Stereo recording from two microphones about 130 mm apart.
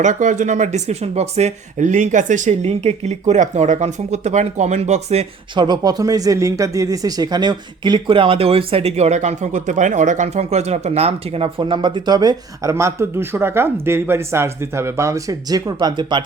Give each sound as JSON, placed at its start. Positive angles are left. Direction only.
{"t": 0.0, "sound": "speech", "side_deg": -70}
{"t": 5.5, "sound": "speech", "side_deg": -35}